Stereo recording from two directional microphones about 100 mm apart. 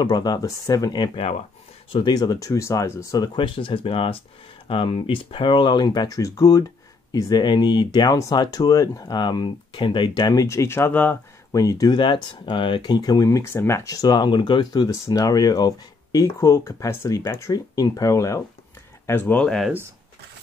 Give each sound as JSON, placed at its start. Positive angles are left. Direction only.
{"t": 0.0, "sound": "speech", "side_deg": 40}
{"t": 3.3, "sound": "speech", "side_deg": 55}
{"t": 11.5, "sound": "speech", "side_deg": 35}
{"t": 12.0, "sound": "speech", "side_deg": 55}
{"t": 14.9, "sound": "speech", "side_deg": 35}
{"t": 19.0, "sound": "speech", "side_deg": 20}